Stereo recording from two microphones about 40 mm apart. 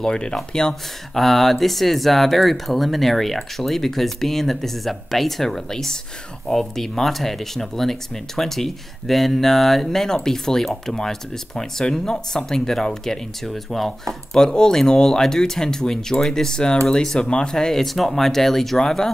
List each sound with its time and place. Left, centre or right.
0.0 s speech: centre
1.1 s speech: centre
14.5 s speech: centre
17.8 s speech: centre